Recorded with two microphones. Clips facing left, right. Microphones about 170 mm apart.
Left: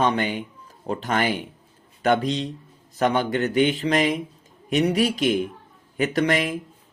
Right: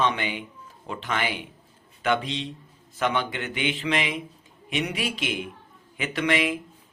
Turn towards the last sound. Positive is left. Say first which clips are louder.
# left 3 dB
turn(degrees=40)  # may be behind; listen again after turning